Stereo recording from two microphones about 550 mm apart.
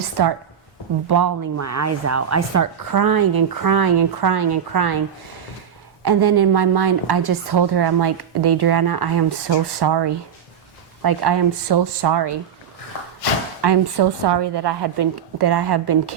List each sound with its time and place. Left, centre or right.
1.0 s speech: right
6.1 s a woman's voice: right
13.6 s a woman's voice: right